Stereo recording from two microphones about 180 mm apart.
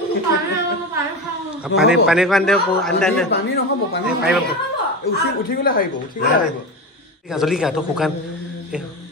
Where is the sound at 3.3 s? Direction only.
65° left (ahead or behind).